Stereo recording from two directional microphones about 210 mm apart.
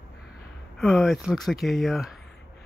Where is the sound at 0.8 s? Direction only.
Centre (ahead or behind).